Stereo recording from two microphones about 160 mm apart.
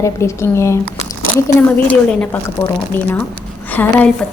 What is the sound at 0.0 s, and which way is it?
Speech, 15° left (ahead or behind).